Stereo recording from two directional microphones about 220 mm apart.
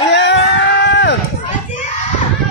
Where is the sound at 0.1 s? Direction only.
55° left (ahead or behind).